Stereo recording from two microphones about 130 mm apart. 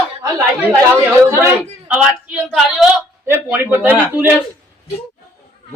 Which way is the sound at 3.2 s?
20° right (ahead or behind).